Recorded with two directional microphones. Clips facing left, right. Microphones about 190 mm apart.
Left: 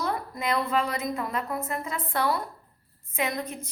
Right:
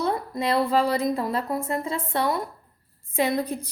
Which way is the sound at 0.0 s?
30° right (ahead or behind).